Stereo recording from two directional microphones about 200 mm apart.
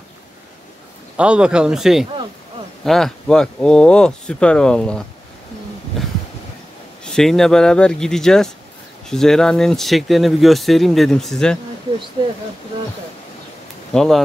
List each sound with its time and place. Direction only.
1.1 s speech: 5° right (ahead or behind)
7.1 s speech: centre (ahead or behind)
13.9 s speech: centre (ahead or behind)